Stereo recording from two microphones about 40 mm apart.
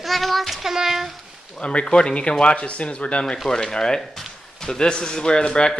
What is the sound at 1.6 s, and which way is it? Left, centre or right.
A man's voice, left.